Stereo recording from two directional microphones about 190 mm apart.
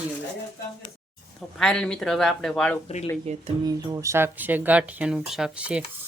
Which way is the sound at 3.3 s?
35° right (ahead or behind).